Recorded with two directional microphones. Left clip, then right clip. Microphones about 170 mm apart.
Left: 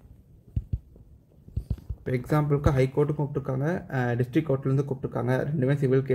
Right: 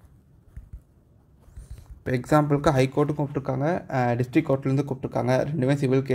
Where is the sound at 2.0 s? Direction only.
20° right (ahead or behind).